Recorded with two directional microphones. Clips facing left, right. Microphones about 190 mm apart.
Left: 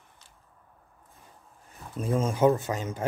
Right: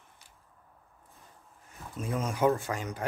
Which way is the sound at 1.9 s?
30° left (ahead or behind).